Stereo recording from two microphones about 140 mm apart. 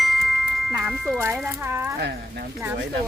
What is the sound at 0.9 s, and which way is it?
Speech, centre (ahead or behind).